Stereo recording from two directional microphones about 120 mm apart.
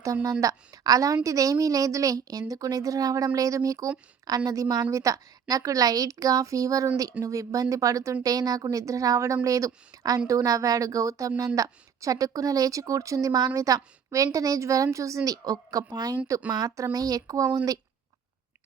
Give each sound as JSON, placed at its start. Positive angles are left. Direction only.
{"t": 0.0, "sound": "speech", "side_deg": -25}